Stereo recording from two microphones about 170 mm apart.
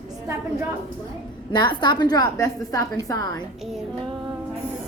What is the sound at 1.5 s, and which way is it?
A woman's voice, 25° left (ahead or behind).